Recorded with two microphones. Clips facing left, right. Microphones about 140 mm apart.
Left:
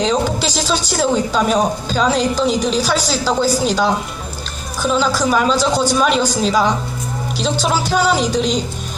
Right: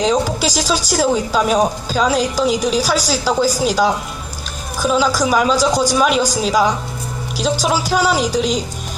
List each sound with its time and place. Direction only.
0.0 s a woman's voice: 10° right (ahead or behind)